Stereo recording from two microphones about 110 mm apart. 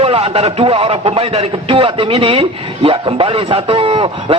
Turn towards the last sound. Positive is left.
turn(degrees=-50)  # may be behind; listen again after turning